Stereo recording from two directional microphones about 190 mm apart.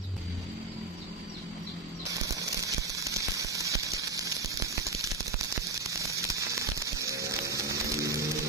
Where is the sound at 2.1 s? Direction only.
15° right (ahead or behind).